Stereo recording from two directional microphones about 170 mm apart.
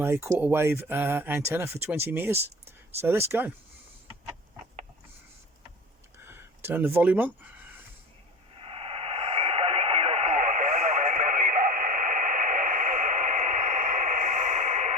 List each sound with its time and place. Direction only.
0.0 s speech: 15° right (ahead or behind)
6.2 s speech: 15° right (ahead or behind)
8.6 s radio: 35° right (ahead or behind)